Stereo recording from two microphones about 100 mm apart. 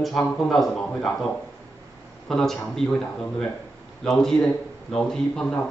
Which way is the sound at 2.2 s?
5° left (ahead or behind).